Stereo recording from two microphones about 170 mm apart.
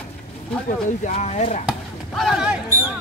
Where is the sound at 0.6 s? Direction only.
45° left (ahead or behind).